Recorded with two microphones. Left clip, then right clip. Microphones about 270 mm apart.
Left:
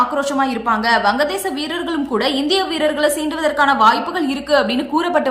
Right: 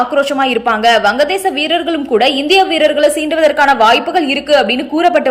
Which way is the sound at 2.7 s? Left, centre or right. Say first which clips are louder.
Right 6 dB; left.